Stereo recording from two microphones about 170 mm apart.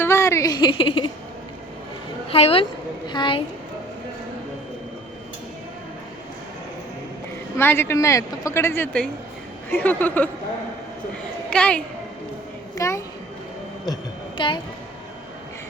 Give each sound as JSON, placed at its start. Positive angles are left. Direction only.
{"t": 0.0, "sound": "a sound", "side_deg": 15}
{"t": 2.3, "sound": "a woman's voice", "side_deg": 35}
{"t": 7.5, "sound": "speech", "side_deg": 15}
{"t": 11.5, "sound": "speech", "side_deg": 5}
{"t": 12.7, "sound": "a child's voice", "side_deg": 15}
{"t": 13.8, "sound": "a sound", "side_deg": 25}